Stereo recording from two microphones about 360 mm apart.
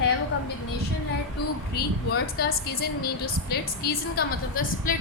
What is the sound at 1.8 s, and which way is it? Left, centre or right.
A woman's voice, left.